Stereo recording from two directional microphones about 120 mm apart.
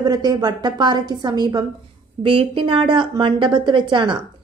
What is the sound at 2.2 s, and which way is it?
A woman's voice, 45° right (ahead or behind).